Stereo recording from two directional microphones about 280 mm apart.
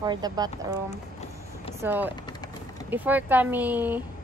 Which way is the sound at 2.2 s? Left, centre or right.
Centre.